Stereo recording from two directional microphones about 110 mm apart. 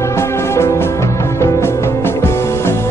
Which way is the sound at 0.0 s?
25° left (ahead or behind).